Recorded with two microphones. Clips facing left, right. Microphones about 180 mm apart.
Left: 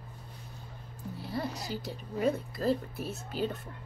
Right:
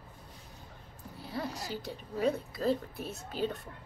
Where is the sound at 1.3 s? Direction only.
Centre (ahead or behind).